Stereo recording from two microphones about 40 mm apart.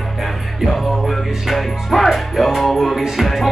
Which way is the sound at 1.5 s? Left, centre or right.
Centre.